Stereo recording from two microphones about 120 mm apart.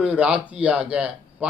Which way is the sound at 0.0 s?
10° right (ahead or behind).